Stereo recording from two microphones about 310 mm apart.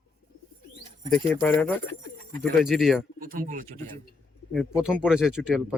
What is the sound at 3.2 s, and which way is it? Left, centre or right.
Speech, right.